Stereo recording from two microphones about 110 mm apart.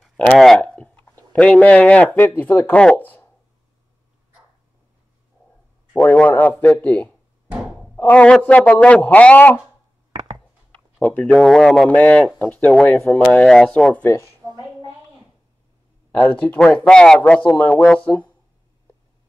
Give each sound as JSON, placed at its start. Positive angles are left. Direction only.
{"t": 0.3, "sound": "speech", "side_deg": 5}
{"t": 5.9, "sound": "speech", "side_deg": 10}
{"t": 7.5, "sound": "thunk", "side_deg": -5}
{"t": 7.9, "sound": "speech", "side_deg": 15}
{"t": 10.7, "sound": "a sound", "side_deg": 15}
{"t": 11.4, "sound": "speech", "side_deg": 5}
{"t": 14.2, "sound": "a sound", "side_deg": -35}
{"t": 16.2, "sound": "speech", "side_deg": 15}